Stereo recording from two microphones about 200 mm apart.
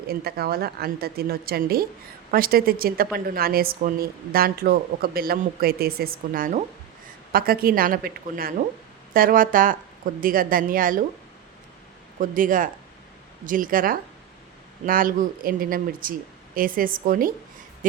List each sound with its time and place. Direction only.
0.1 s a woman's voice: 50° right (ahead or behind)
12.2 s a woman's voice: 45° right (ahead or behind)